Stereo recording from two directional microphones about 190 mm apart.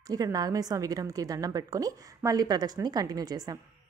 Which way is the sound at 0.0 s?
20° right (ahead or behind).